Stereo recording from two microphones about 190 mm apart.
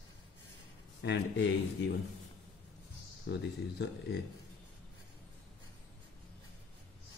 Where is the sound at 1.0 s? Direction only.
70° left (ahead or behind).